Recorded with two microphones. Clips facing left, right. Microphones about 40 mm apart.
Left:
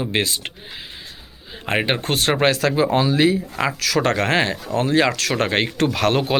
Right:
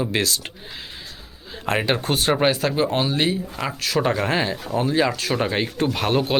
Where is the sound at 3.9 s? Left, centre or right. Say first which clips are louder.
Left 2 dB; left.